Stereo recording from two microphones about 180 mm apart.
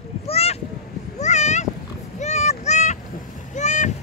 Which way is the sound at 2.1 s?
40° left (ahead or behind).